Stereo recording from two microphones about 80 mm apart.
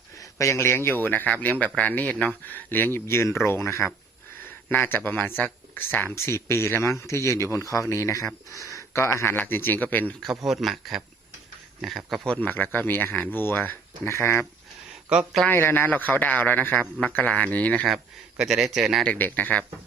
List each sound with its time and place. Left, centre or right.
0.2 s speech: left
4.4 s speech: left
6.1 s speech: left
10.2 s a man's voice: centre
12.4 s speech: left
15.4 s speech: left
17.8 s a man's voice: centre
19.0 s speech: left